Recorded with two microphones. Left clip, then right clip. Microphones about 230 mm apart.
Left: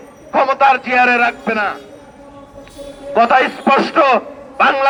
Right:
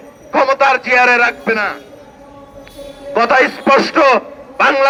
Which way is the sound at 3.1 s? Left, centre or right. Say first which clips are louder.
Even; right.